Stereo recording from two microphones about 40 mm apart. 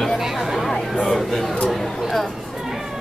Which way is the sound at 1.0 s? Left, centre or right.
Centre.